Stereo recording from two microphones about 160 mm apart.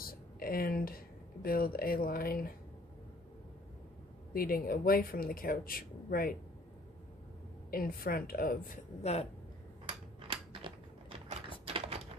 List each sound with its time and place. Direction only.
0.0 s speech: 65° left (ahead or behind)
4.3 s speech: 70° left (ahead or behind)
7.7 s a woman's voice: 65° left (ahead or behind)
9.0 s speech: 40° left (ahead or behind)
9.8 s a sound: 35° right (ahead or behind)
11.6 s typing: 40° right (ahead or behind)